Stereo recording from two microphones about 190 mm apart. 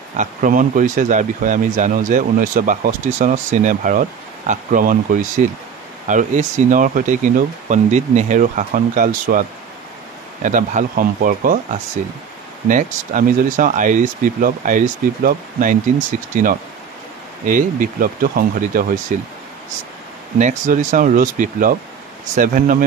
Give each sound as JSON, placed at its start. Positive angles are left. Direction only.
{"t": 0.2, "sound": "speech", "side_deg": -45}
{"t": 20.3, "sound": "speech", "side_deg": -40}